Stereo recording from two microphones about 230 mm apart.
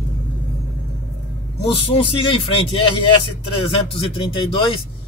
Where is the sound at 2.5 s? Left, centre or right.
Left.